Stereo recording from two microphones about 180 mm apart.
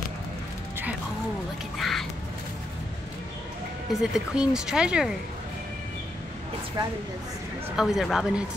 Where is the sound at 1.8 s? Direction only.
Centre (ahead or behind).